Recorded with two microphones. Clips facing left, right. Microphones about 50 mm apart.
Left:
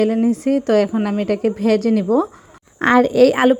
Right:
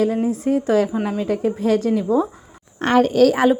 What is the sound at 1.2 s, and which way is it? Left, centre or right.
A woman's voice, left.